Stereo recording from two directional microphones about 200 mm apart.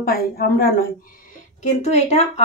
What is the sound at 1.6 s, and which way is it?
Speech, 35° left (ahead or behind).